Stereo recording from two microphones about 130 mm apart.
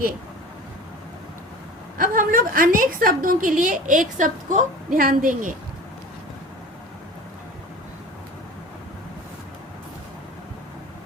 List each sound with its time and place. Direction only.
2.0 s a woman's voice: 90° right